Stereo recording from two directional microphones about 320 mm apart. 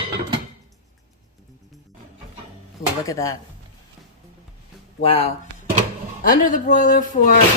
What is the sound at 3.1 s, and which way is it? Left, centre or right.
Speech, centre.